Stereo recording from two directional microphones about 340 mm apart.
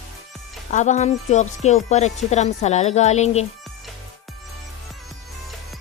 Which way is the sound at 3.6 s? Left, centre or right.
Centre.